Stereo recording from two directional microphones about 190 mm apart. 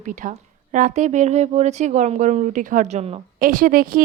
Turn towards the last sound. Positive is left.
turn(degrees=-50)  # may be behind; listen again after turning